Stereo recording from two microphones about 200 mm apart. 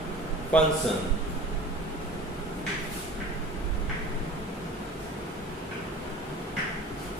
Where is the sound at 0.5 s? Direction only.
5° left (ahead or behind).